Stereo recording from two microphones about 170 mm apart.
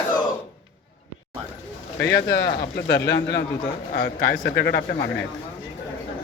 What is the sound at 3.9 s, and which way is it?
A man's voice, 65° left (ahead or behind).